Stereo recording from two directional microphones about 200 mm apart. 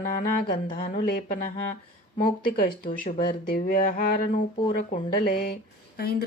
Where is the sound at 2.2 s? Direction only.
45° left (ahead or behind).